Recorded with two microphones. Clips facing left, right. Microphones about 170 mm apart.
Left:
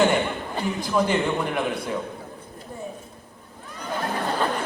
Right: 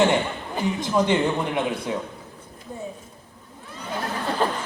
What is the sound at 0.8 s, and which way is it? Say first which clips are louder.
Speech: even; 20° right (ahead or behind).